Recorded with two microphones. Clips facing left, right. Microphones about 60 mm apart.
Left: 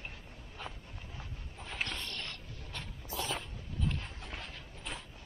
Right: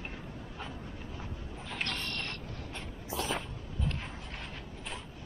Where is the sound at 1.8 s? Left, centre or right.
Right.